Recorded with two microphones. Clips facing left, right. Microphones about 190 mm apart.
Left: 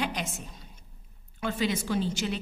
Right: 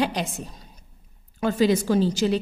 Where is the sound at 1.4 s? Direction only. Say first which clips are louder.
Right 9 dB; 40° right (ahead or behind).